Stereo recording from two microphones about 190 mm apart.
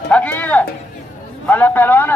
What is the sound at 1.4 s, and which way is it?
Speech, 10° left (ahead or behind).